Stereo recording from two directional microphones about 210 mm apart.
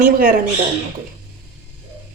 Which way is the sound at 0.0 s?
40° right (ahead or behind).